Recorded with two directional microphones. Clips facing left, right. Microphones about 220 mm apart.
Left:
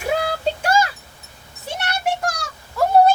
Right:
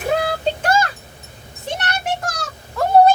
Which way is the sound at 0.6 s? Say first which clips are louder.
Even; 10° left (ahead or behind).